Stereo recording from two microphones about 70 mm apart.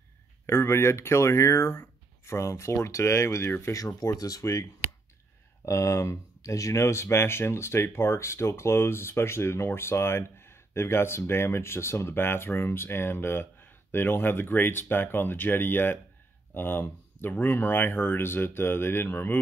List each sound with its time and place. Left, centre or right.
0.5 s speech: left
3.7 s speech: left
5.7 s speech: left